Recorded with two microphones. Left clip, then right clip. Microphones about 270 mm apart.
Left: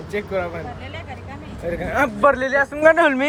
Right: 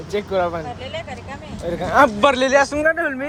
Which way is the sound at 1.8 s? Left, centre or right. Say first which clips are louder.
Right 3 dB; centre.